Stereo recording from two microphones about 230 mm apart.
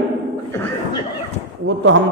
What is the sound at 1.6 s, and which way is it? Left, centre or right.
Speech, right.